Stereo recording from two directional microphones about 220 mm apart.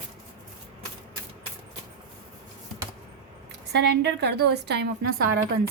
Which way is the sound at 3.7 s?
50° right (ahead or behind).